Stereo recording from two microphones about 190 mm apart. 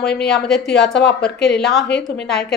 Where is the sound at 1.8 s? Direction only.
60° left (ahead or behind).